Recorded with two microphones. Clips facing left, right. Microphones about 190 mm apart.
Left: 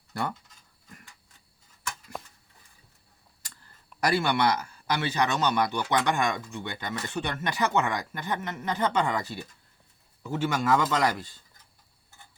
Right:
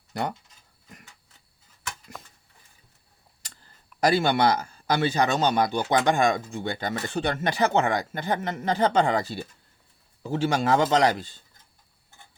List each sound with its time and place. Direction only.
0.1 s speech: 20° right (ahead or behind)
4.0 s a man's voice: 30° right (ahead or behind)